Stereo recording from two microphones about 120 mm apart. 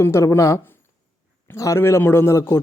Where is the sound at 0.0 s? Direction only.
20° left (ahead or behind).